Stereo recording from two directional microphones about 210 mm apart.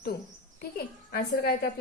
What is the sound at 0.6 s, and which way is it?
A woman's voice, 50° left (ahead or behind).